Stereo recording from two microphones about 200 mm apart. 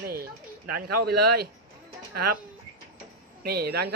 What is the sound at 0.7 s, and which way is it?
Speech, 50° right (ahead or behind).